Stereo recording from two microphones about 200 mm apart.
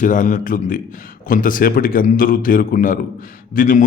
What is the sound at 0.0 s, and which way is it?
A man's voice, 40° left (ahead or behind).